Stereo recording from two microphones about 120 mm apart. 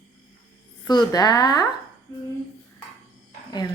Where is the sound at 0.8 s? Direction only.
35° left (ahead or behind).